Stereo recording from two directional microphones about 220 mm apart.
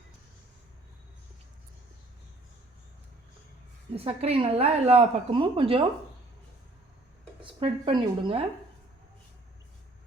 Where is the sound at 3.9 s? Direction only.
25° right (ahead or behind).